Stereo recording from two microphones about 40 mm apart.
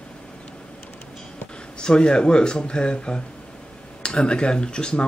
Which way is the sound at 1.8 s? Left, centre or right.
Left.